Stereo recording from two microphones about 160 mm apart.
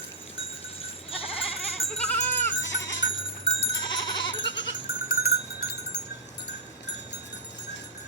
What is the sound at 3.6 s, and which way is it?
Goat, 30° left (ahead or behind).